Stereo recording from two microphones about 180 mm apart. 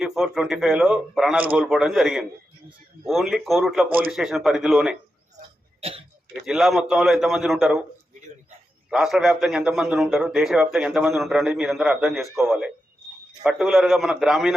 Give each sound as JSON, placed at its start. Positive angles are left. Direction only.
{"t": 0.0, "sound": "a man's voice", "side_deg": 0}
{"t": 3.8, "sound": "a man's voice", "side_deg": -55}
{"t": 4.1, "sound": "a man's voice", "side_deg": 0}
{"t": 5.8, "sound": "speech", "side_deg": -30}
{"t": 6.4, "sound": "a man's voice", "side_deg": 0}
{"t": 8.9, "sound": "a man's voice", "side_deg": -5}